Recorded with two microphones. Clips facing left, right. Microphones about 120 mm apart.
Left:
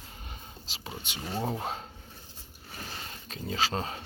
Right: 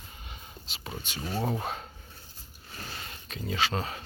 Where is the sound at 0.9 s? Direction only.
20° left (ahead or behind).